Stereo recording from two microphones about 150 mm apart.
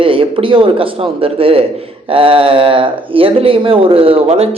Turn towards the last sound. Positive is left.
turn(degrees=-40)  # may be behind; listen again after turning